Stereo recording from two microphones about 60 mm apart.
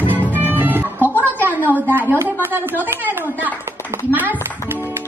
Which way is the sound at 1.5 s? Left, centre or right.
Right.